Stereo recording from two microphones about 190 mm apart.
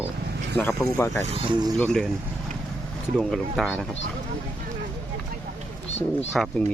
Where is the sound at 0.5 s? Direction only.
10° left (ahead or behind).